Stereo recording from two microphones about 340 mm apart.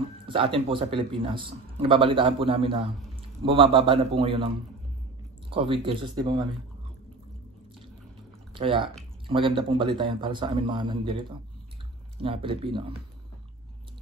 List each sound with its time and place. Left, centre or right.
0.3 s a man's voice: centre
5.5 s a man's voice: centre
8.5 s a man's voice: centre